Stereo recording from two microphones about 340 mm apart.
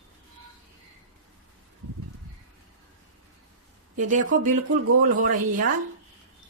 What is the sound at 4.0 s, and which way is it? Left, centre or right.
Speech, right.